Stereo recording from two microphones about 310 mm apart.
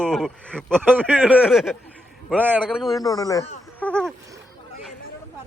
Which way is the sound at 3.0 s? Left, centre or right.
Centre.